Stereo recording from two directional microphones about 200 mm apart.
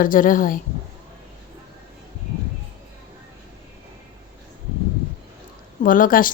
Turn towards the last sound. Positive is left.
turn(degrees=45)  # may be behind; listen again after turning